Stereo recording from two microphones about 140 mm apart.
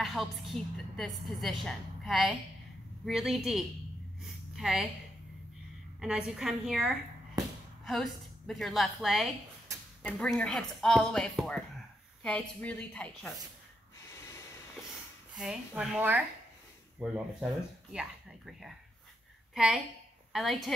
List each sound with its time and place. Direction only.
0.0 s a woman's voice: centre (ahead or behind)
4.2 s a sound: centre (ahead or behind)
5.9 s a woman's voice: 5° right (ahead or behind)
14.1 s snort: 20° left (ahead or behind)
15.3 s a woman's voice: 5° right (ahead or behind)